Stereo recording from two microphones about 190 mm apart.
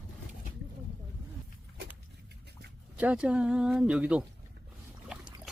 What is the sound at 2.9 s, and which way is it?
Speech, 5° right (ahead or behind).